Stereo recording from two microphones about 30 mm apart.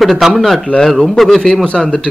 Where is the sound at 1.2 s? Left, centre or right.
Centre.